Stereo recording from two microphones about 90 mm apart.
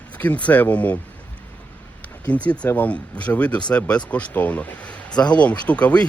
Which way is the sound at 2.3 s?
15° left (ahead or behind).